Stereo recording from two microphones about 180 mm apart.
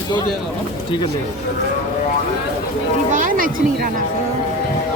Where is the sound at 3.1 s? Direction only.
45° right (ahead or behind).